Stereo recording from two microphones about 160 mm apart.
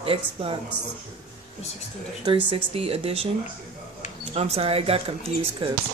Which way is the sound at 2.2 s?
35° right (ahead or behind).